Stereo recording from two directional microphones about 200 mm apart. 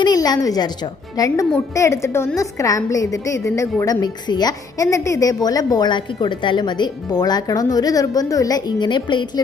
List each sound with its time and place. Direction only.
0.0 s a woman's voice: 20° left (ahead or behind)